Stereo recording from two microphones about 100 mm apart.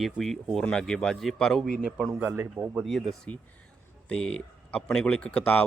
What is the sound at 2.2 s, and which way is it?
Speech, 15° right (ahead or behind).